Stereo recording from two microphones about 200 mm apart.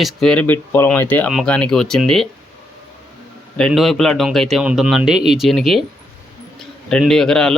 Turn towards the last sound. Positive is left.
turn(degrees=5)  # may be behind; listen again after turning